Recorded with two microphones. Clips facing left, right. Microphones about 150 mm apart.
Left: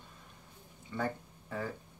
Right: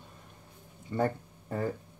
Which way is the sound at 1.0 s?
45° right (ahead or behind).